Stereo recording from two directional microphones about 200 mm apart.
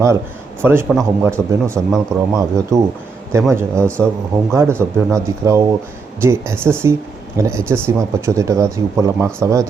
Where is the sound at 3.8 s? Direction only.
5° left (ahead or behind).